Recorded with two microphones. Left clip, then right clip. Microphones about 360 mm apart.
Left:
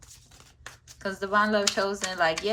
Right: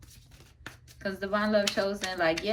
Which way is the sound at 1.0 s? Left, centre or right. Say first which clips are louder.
Left 5 dB; centre.